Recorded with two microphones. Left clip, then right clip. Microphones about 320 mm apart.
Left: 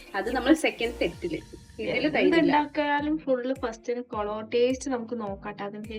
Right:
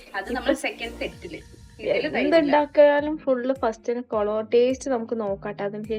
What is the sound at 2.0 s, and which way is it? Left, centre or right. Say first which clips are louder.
Speech: even; centre.